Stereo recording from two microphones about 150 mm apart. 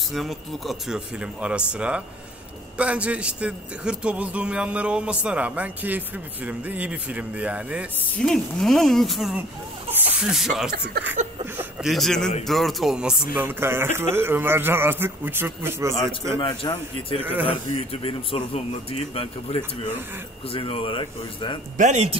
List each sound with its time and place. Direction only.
0.1 s a man's voice: centre (ahead or behind)
8.2 s speech: 5° left (ahead or behind)
10.7 s speech: 90° right
11.8 s a man's voice: centre (ahead or behind); by 15.9 s 15° right (ahead or behind)
16.3 s a man's voice: 30° left (ahead or behind)
17.2 s a man's voice: 10° right (ahead or behind)
17.5 s a man's voice: 40° left (ahead or behind)
21.7 s speech: 55° right (ahead or behind)